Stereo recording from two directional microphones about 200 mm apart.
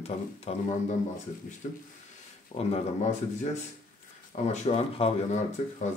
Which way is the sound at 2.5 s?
30° left (ahead or behind).